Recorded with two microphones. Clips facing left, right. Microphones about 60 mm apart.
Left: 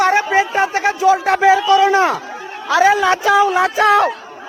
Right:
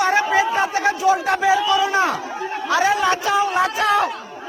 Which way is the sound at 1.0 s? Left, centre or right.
Left.